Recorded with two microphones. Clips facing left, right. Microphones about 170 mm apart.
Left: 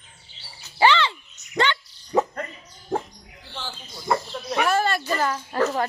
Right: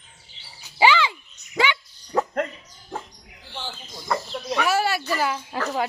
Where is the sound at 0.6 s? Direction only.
10° right (ahead or behind).